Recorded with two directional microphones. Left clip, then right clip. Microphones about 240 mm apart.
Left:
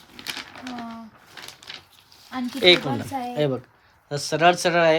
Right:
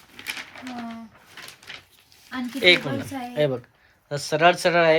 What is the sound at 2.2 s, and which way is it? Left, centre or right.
Speech, centre.